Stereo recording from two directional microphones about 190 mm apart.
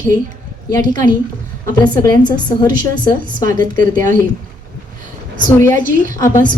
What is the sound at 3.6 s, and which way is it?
Speech, 45° right (ahead or behind).